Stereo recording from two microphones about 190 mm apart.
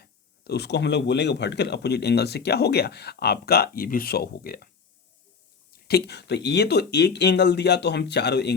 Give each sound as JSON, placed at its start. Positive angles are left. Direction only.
{"t": 0.0, "sound": "speech", "side_deg": 60}
{"t": 5.9, "sound": "speech", "side_deg": 60}